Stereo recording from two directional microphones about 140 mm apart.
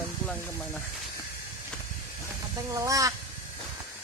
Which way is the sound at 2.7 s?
25° right (ahead or behind).